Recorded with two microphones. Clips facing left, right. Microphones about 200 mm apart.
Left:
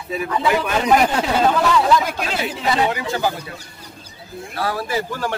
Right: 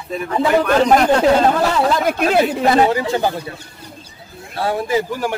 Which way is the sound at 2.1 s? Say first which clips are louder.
Right 9 dB; 55° right (ahead or behind).